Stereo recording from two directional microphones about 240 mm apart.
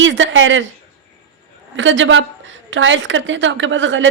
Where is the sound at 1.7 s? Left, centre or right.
Right.